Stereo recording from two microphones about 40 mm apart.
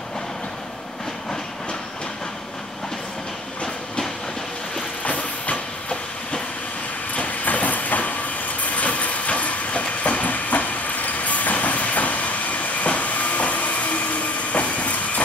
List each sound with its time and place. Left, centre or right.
5.0 s train: left
7.4 s train: left